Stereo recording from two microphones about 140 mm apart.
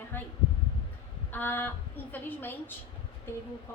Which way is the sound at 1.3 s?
15° left (ahead or behind).